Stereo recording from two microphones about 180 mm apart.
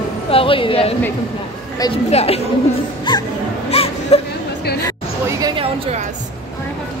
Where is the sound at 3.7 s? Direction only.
35° left (ahead or behind).